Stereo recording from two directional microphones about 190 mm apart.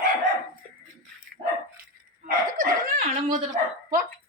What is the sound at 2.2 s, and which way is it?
Dog, 45° right (ahead or behind).